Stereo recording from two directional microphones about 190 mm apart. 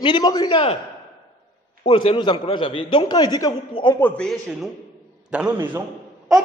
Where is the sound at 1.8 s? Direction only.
30° left (ahead or behind).